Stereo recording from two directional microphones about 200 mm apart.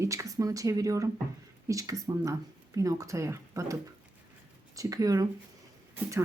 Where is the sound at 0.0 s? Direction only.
15° right (ahead or behind).